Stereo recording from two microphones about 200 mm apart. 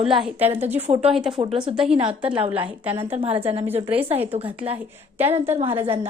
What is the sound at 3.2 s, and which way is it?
Speech, 25° right (ahead or behind).